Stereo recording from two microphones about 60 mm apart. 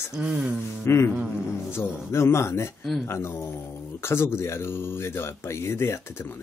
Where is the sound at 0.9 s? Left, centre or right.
Left.